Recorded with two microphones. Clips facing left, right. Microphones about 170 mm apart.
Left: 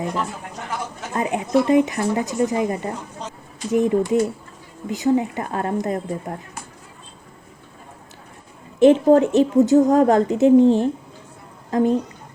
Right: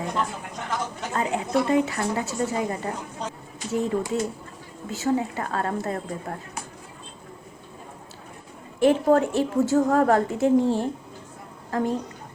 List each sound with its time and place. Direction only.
0.7 s a woman's voice: 15° left (ahead or behind)
8.8 s a woman's voice: 20° left (ahead or behind)